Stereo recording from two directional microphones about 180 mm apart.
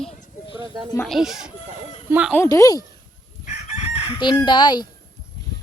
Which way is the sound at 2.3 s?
15° left (ahead or behind).